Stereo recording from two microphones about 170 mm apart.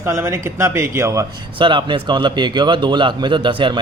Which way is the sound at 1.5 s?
30° right (ahead or behind).